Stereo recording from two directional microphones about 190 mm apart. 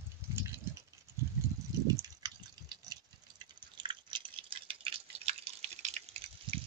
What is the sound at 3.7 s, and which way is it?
Drip, 25° right (ahead or behind).